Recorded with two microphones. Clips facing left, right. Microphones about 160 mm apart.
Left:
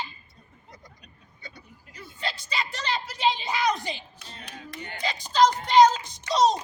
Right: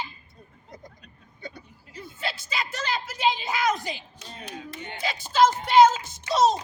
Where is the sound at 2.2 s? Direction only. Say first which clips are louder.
Even; 5° right (ahead or behind).